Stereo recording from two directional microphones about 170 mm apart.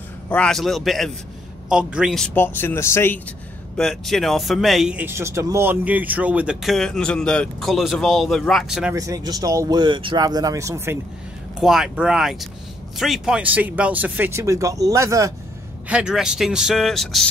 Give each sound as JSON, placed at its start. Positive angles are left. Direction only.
{"t": 0.3, "sound": "speech", "side_deg": 5}
{"t": 3.7, "sound": "speech", "side_deg": 0}
{"t": 8.9, "sound": "speech", "side_deg": -20}
{"t": 11.6, "sound": "speech", "side_deg": -5}
{"t": 15.9, "sound": "speech", "side_deg": -5}